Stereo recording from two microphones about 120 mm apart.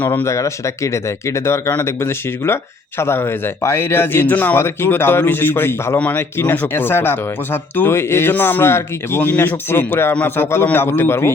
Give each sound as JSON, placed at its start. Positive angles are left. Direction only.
{"t": 0.0, "sound": "speech", "side_deg": 15}